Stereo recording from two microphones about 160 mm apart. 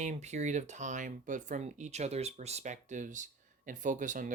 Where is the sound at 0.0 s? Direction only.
45° right (ahead or behind).